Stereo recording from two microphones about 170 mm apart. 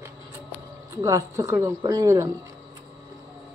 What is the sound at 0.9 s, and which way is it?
Speech, 20° right (ahead or behind).